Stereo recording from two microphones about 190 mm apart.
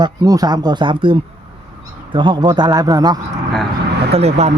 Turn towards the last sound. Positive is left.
turn(degrees=-35)  # may be behind; listen again after turning